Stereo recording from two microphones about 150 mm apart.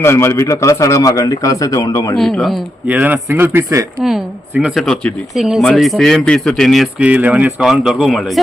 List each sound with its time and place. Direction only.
0.0 s a man's voice: 15° left (ahead or behind)
2.1 s speech: centre (ahead or behind)
2.8 s speech: 10° right (ahead or behind)
4.0 s speech: 5° right (ahead or behind)
7.0 s speech: 10° right (ahead or behind)